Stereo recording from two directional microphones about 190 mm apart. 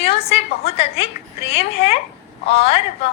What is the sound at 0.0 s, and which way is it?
A woman's voice, 30° left (ahead or behind).